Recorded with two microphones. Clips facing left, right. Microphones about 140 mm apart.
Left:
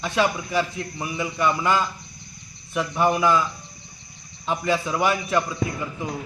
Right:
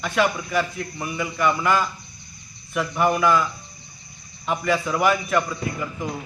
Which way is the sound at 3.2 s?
25° left (ahead or behind).